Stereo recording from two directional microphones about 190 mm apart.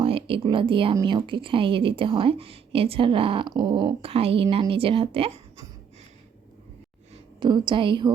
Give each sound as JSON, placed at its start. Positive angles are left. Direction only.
{"t": 0.0, "sound": "a woman's voice", "side_deg": -30}
{"t": 7.1, "sound": "a woman's voice", "side_deg": -25}